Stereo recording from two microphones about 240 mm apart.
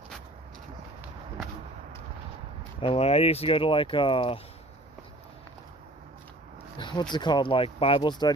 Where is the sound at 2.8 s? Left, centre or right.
Left.